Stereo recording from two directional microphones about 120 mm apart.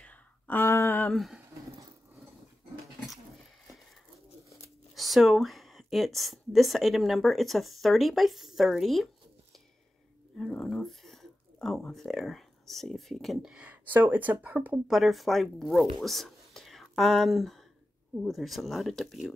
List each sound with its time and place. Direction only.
0.0 s a sound: 15° left (ahead or behind)
1.0 s speech: centre (ahead or behind)
4.5 s speech: centre (ahead or behind)
10.3 s a sound: 5° left (ahead or behind)
11.6 s speech: centre (ahead or behind); by 14.8 s 15° right (ahead or behind)
14.9 s speech: centre (ahead or behind)